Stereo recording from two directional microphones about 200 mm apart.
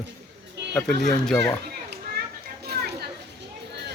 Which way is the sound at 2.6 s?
55° right (ahead or behind).